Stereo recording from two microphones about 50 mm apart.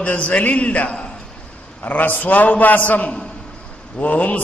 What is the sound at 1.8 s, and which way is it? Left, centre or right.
A man's voice, left.